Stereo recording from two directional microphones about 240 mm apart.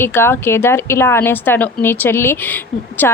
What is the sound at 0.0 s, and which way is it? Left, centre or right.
A woman's voice, centre.